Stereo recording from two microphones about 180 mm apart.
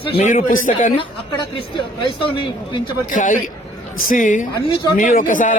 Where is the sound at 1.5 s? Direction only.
25° left (ahead or behind).